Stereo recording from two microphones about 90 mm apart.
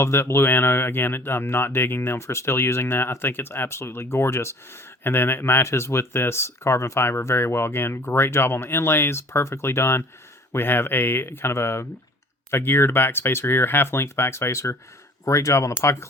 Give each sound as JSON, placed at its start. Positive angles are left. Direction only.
{"t": 0.0, "sound": "speech", "side_deg": 30}